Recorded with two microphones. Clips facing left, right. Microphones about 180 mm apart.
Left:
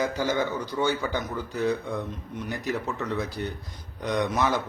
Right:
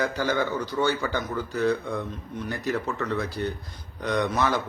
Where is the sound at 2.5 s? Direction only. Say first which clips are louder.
Right 2 dB; 15° left (ahead or behind).